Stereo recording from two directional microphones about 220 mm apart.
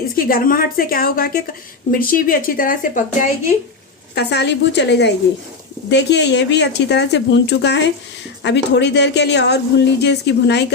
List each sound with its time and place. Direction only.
0.2 s speech: 40° left (ahead or behind)
4.1 s a woman's voice: 50° left (ahead or behind)